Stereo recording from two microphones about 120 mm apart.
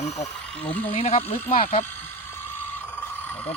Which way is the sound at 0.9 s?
50° left (ahead or behind).